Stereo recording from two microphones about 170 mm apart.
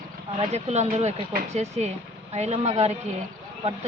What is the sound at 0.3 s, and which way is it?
Speech, 40° right (ahead or behind).